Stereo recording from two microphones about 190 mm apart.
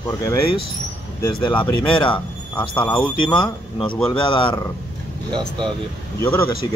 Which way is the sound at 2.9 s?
25° left (ahead or behind).